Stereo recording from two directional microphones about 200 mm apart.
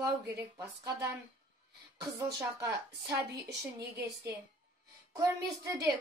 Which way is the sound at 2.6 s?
15° right (ahead or behind).